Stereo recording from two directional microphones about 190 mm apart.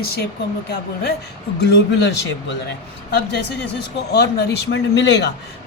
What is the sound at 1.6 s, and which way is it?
Speech, 60° left (ahead or behind).